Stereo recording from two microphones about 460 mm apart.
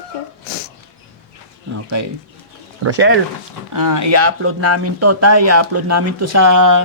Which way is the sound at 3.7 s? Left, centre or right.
Right.